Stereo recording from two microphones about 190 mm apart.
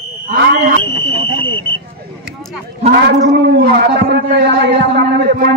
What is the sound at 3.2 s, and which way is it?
A man's voice, 60° right (ahead or behind).